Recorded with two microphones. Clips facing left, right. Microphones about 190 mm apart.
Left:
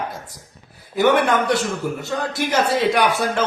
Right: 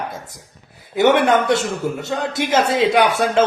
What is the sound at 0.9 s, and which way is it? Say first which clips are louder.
Speech: right 2 dB; 25° right (ahead or behind).